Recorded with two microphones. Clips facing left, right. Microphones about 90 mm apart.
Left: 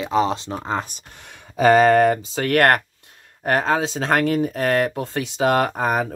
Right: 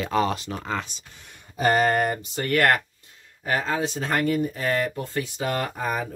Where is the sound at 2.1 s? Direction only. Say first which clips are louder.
Left 5 dB; 90° left.